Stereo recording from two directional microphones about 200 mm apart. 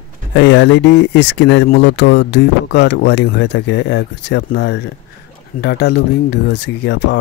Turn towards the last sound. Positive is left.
turn(degrees=60)  # may be behind; listen again after turning